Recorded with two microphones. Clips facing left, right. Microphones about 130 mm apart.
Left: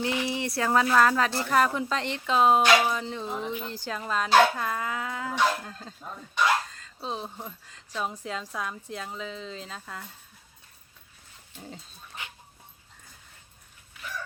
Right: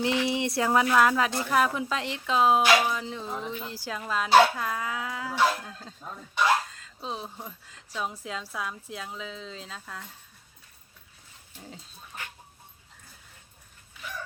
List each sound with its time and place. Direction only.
0.3 s speech: 20° right (ahead or behind)
0.9 s speech: 10° right (ahead or behind)